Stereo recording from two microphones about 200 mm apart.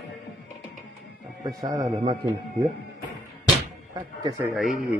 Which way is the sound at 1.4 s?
20° right (ahead or behind).